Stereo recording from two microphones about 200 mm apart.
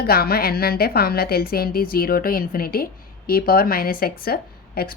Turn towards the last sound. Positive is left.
turn(degrees=50)  # may be behind; listen again after turning